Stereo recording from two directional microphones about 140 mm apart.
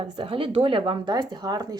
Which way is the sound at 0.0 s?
40° right (ahead or behind).